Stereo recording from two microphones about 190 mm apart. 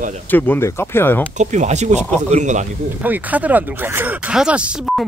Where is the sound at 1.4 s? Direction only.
40° right (ahead or behind).